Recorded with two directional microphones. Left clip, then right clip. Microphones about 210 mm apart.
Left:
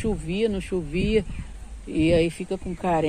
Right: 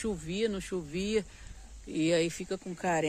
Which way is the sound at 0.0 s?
20° right (ahead or behind).